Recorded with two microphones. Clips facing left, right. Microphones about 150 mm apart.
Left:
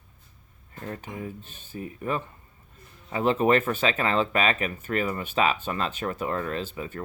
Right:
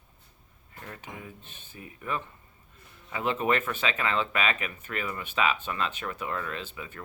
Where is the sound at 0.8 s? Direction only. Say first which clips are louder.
Left 7 dB; 40° left (ahead or behind).